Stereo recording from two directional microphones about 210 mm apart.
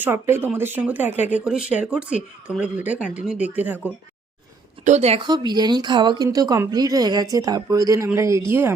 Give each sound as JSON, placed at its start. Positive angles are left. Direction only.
{"t": 0.0, "sound": "speech", "side_deg": -10}
{"t": 4.9, "sound": "speech", "side_deg": -30}